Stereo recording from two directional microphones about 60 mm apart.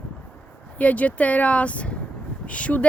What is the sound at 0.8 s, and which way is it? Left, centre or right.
Speech, left.